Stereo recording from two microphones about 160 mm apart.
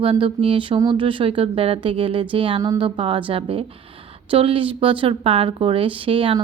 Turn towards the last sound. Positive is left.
turn(degrees=-35)  # may be behind; listen again after turning